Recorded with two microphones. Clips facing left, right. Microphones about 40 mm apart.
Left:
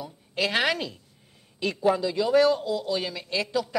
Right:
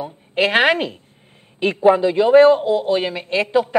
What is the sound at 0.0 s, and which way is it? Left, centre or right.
A woman's voice, right.